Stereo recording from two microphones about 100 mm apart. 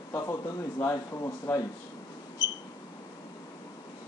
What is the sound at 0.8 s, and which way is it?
Speech, 30° left (ahead or behind).